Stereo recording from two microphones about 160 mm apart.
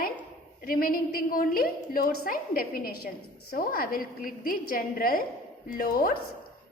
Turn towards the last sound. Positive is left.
turn(degrees=65)  # may be behind; listen again after turning